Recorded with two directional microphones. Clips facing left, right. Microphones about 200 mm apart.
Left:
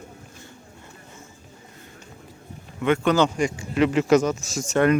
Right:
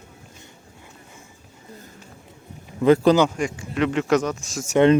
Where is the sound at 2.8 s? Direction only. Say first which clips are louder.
Right 6 dB; 35° right (ahead or behind).